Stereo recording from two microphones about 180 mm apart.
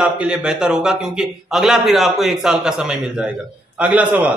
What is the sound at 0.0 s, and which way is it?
A man's voice, 5° right (ahead or behind).